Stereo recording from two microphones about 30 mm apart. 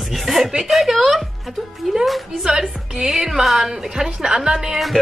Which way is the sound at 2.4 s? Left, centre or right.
Right.